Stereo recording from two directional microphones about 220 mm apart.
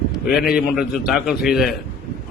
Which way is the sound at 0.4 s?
5° right (ahead or behind).